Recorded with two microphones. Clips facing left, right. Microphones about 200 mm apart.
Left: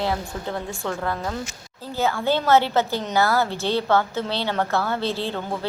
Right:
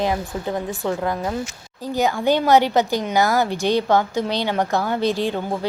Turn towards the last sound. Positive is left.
turn(degrees=-15)  # may be behind; listen again after turning